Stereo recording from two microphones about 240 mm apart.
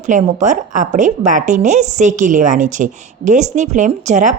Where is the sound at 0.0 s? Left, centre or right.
Right.